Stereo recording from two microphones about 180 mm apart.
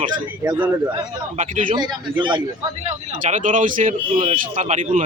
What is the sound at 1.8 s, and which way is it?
Speech, 25° right (ahead or behind).